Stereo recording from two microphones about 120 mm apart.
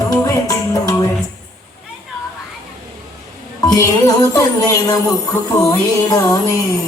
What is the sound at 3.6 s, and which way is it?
Music, 35° left (ahead or behind).